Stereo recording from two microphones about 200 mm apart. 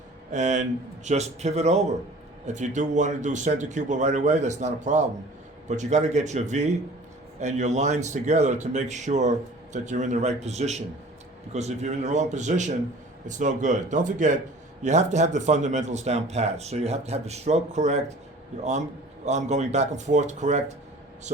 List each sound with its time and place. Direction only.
0.3 s speech: 35° right (ahead or behind)
19.2 s speech: 35° right (ahead or behind)